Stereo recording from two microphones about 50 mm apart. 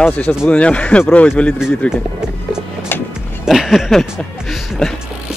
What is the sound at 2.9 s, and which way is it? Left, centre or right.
Music, left.